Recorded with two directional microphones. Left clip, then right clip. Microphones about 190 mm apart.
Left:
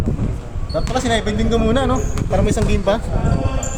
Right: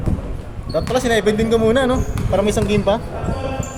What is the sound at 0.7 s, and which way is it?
Speech, 55° right (ahead or behind).